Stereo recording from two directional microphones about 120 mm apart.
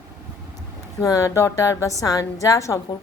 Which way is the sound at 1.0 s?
25° left (ahead or behind).